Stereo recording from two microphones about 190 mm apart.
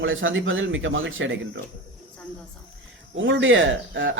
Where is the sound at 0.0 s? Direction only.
90° right.